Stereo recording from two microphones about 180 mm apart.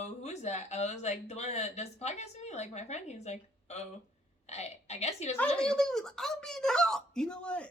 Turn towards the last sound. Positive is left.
turn(degrees=5)  # may be behind; listen again after turning